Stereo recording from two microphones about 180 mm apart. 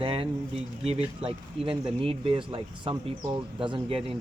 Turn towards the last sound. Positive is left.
turn(degrees=-30)  # may be behind; listen again after turning